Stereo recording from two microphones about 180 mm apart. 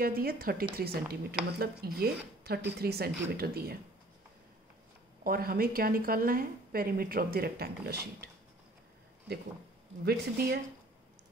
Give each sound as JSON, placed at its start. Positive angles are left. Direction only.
{"t": 0.0, "sound": "a woman's voice", "side_deg": -55}
{"t": 5.2, "sound": "a woman's voice", "side_deg": -55}
{"t": 10.0, "sound": "a woman's voice", "side_deg": -60}